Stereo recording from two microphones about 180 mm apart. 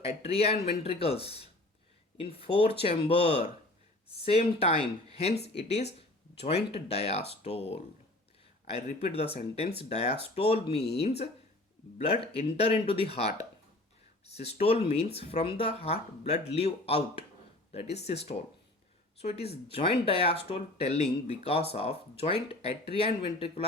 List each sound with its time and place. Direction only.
0.0 s speech: 35° left (ahead or behind)
14.3 s speech: 35° left (ahead or behind)
19.2 s speech: 35° left (ahead or behind)